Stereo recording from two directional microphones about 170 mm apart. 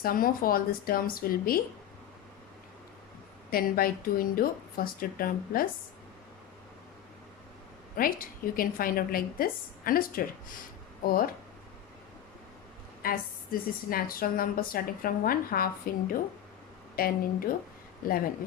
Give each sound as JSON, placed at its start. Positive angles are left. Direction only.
{"t": 0.0, "sound": "a woman's voice", "side_deg": 60}
{"t": 3.5, "sound": "a woman's voice", "side_deg": 60}
{"t": 7.9, "sound": "a woman's voice", "side_deg": 55}
{"t": 13.0, "sound": "a woman's voice", "side_deg": 60}